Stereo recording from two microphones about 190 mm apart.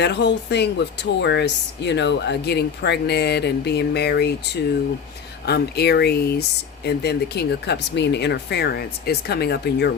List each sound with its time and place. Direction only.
0.0 s speech: 65° left (ahead or behind)
5.5 s speech: 60° left (ahead or behind)